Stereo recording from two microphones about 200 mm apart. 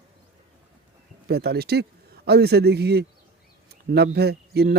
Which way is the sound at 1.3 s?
50° right (ahead or behind).